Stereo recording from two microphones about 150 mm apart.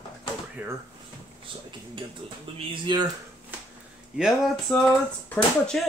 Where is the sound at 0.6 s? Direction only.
15° right (ahead or behind).